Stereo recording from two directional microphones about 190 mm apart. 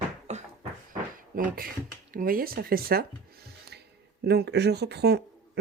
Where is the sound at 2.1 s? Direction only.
50° right (ahead or behind).